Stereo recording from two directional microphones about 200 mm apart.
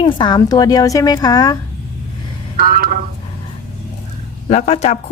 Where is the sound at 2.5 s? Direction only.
45° right (ahead or behind).